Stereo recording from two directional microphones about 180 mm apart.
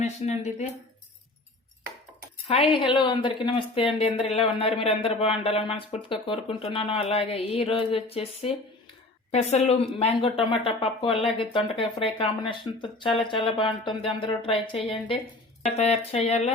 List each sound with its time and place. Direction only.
0.0 s speech: 40° left (ahead or behind)
2.5 s speech: 30° left (ahead or behind)